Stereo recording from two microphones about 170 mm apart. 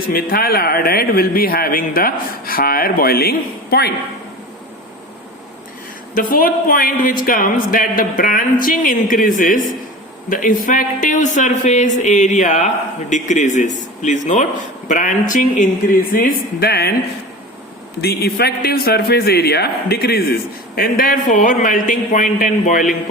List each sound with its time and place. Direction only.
0.1 s a man's voice: 60° left (ahead or behind)
6.1 s a man's voice: 55° left (ahead or behind)
18.0 s a man's voice: 70° left (ahead or behind); by 23.0 s 50° left (ahead or behind)